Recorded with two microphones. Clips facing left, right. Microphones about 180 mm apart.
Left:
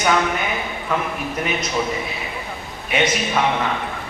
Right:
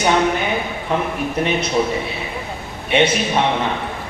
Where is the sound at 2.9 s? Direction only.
30° right (ahead or behind).